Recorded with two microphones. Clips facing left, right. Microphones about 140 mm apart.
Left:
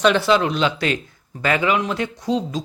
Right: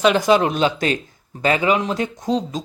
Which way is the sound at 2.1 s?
45° right (ahead or behind).